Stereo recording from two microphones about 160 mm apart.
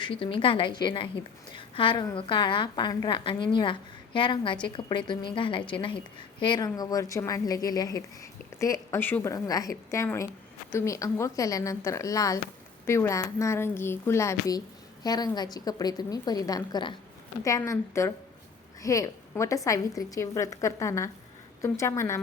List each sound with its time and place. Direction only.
0.0 s a woman's voice: 35° left (ahead or behind); by 22.2 s 20° left (ahead or behind)